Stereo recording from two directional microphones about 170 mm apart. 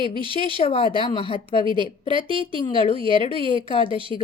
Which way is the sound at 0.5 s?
35° left (ahead or behind).